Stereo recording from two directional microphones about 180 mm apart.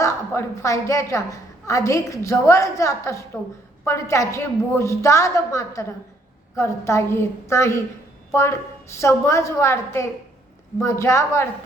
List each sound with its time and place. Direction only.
0.0 s a woman's voice: 15° left (ahead or behind)